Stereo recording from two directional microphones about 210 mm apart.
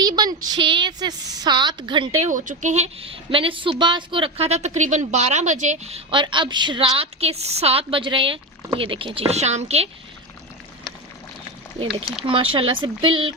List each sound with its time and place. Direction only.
0.0 s a sound: 20° right (ahead or behind)
0.4 s a woman's voice: 20° right (ahead or behind)
2.2 s a woman's voice: 40° right (ahead or behind)
12.2 s a woman's voice: 25° right (ahead or behind)